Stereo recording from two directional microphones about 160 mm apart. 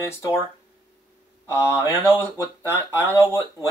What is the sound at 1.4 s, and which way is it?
Speech, 20° left (ahead or behind).